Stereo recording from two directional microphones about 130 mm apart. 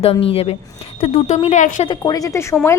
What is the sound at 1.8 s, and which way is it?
Speech, 35° left (ahead or behind).